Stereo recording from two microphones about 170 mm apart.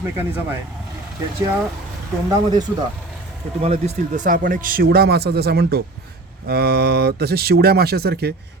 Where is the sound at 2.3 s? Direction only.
25° right (ahead or behind).